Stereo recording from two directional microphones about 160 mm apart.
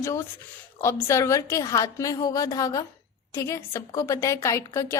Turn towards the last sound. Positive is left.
turn(degrees=20)  # may be behind; listen again after turning